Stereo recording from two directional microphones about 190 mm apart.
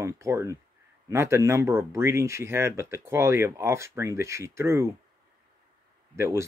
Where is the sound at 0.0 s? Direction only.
15° right (ahead or behind).